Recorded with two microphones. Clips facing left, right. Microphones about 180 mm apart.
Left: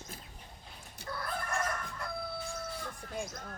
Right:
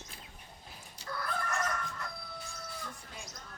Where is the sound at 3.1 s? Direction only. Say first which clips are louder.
Left 9 dB; 50° left (ahead or behind).